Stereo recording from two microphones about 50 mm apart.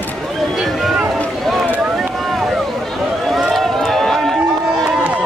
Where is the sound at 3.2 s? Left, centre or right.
Centre.